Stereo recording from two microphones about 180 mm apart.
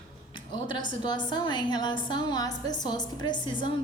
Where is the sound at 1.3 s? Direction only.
25° left (ahead or behind).